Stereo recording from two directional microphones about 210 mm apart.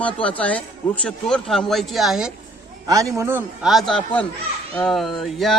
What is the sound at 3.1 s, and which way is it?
Speech, 10° right (ahead or behind).